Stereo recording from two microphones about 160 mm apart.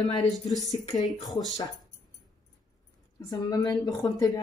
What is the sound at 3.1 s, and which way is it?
Speech, 25° left (ahead or behind).